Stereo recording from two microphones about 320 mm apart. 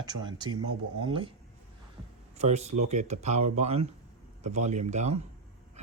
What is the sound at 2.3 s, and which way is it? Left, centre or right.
Speech, right.